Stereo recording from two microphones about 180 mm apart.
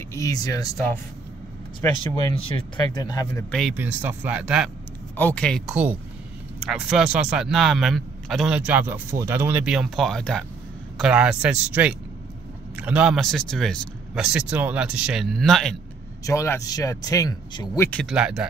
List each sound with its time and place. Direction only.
0.1 s speech: 20° left (ahead or behind)
1.8 s speech: 15° left (ahead or behind)
2.5 s speech: 25° left (ahead or behind)
3.5 s a man's voice: 5° right (ahead or behind)
5.1 s a man's voice: 10° left (ahead or behind)
16.3 s speech: 15° left (ahead or behind)
18.0 s a man's voice: 5° right (ahead or behind)